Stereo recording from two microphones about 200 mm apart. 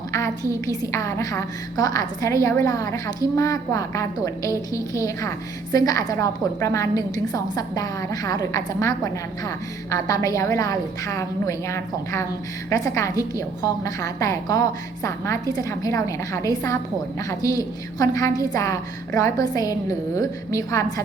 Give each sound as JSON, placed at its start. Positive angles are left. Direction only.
{"t": 0.1, "sound": "a woman's voice", "side_deg": 15}